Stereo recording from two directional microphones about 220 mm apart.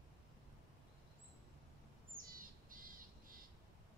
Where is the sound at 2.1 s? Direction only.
40° right (ahead or behind).